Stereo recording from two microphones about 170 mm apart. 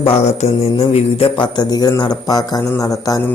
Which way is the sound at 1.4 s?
25° left (ahead or behind).